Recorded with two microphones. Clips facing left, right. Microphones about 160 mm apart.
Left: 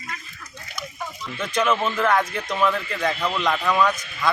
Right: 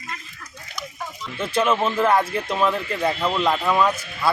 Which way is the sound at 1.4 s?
30° right (ahead or behind).